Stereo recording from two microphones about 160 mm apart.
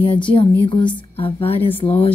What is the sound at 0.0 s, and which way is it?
Speech, 30° left (ahead or behind).